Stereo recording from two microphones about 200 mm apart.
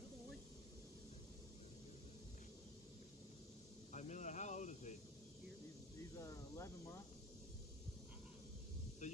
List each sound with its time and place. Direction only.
3.9 s snake: 35° left (ahead or behind)
5.9 s cricket: 15° left (ahead or behind)
9.0 s a sound: 35° left (ahead or behind)